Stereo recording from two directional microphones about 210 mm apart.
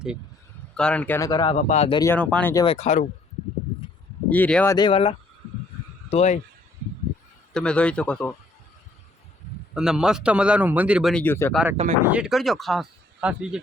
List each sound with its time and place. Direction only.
0.8 s speech: 5° left (ahead or behind)
1.3 s speech: 20° left (ahead or behind)
1.5 s speech: 35° left (ahead or behind)
2.0 s speech: 10° left (ahead or behind)
2.6 s speech: 35° left (ahead or behind)
4.3 s speech: 5° left (ahead or behind); by 6.4 s 30° left (ahead or behind)
7.5 s speech: 5° left (ahead or behind)
9.7 s speech: 5° right (ahead or behind)
11.5 s speech: 10° right (ahead or behind)